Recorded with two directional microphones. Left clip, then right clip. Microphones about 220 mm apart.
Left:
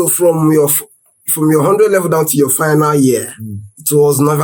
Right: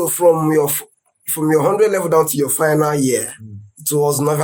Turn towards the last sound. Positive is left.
turn(degrees=0)  # may be behind; listen again after turning